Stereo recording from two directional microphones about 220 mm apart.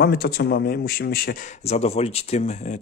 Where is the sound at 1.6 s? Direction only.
30° left (ahead or behind).